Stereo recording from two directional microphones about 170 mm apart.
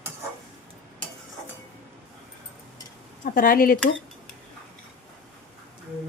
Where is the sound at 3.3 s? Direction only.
55° left (ahead or behind).